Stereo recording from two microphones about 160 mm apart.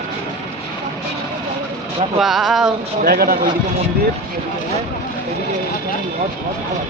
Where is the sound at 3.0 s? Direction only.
70° right (ahead or behind).